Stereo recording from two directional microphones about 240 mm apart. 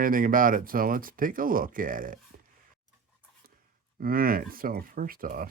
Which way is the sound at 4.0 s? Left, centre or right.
Right.